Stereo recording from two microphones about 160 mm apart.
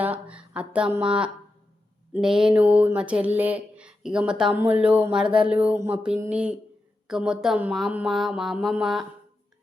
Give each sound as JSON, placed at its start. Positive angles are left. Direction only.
{"t": 0.0, "sound": "speech", "side_deg": -10}
{"t": 7.1, "sound": "mantra", "side_deg": -5}